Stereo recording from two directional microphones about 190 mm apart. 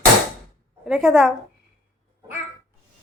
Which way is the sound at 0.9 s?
5° right (ahead or behind).